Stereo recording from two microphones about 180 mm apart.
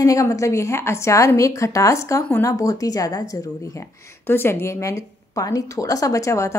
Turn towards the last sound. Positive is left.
turn(degrees=15)  # may be behind; listen again after turning